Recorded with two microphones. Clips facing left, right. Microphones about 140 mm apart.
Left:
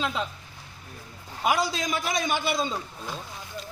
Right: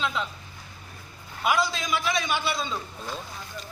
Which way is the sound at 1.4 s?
40° left (ahead or behind).